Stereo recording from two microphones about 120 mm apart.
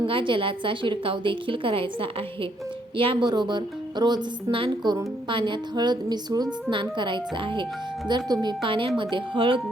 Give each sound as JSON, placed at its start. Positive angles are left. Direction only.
{"t": 0.0, "sound": "a woman's voice", "side_deg": -45}